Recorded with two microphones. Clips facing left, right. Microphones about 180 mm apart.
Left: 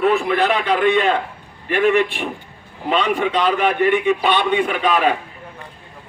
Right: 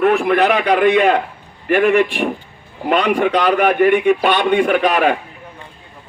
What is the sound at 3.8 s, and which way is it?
A man's voice, 55° right (ahead or behind).